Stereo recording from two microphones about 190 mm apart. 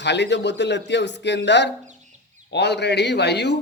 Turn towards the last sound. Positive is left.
turn(degrees=65)  # may be behind; listen again after turning